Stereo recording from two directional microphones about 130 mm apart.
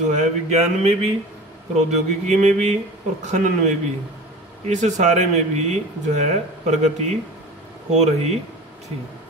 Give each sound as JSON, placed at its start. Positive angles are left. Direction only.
{"t": 0.0, "sound": "speech", "side_deg": -70}